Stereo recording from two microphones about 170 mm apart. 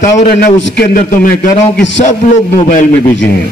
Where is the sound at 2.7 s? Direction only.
50° left (ahead or behind).